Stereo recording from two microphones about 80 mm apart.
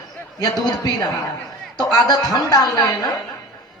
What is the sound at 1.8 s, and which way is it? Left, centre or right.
Speech, left.